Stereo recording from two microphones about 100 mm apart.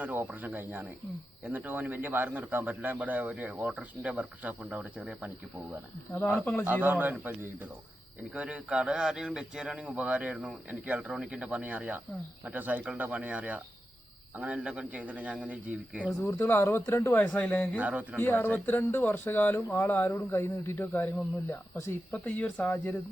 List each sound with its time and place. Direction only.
0.0 s speech: 20° right (ahead or behind)
6.1 s speech: 5° left (ahead or behind)
6.4 s speech: 20° left (ahead or behind)
6.8 s speech: 15° right (ahead or behind)
16.2 s speech: 25° left (ahead or behind)
17.2 s speech: 10° left (ahead or behind)
17.7 s speech: 15° right (ahead or behind)
18.2 s speech: 20° left (ahead or behind)
22.3 s speech: 15° left (ahead or behind)